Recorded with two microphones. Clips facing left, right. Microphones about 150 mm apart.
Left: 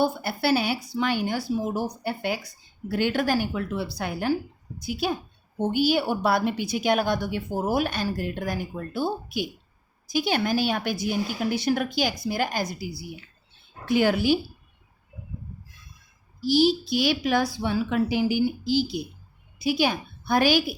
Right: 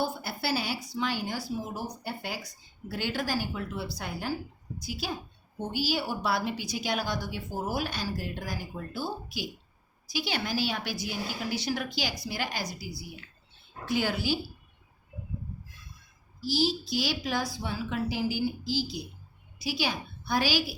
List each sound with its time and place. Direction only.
0.0 s a woman's voice: 60° left (ahead or behind)
16.4 s a woman's voice: 65° left (ahead or behind)